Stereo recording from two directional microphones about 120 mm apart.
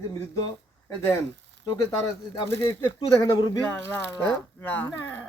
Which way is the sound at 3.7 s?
15° left (ahead or behind).